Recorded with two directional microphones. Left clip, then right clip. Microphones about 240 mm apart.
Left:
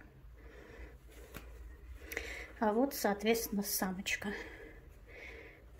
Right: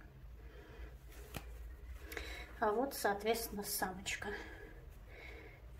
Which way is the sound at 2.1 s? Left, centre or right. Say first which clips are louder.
Left 5 dB; left.